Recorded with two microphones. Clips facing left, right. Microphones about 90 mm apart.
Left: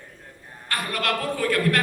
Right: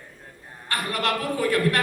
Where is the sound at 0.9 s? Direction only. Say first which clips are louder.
Even; 20° right (ahead or behind).